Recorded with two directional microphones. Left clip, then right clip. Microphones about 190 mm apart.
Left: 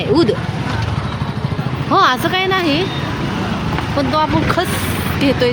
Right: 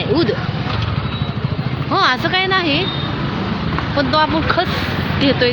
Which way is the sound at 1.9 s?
25° left (ahead or behind).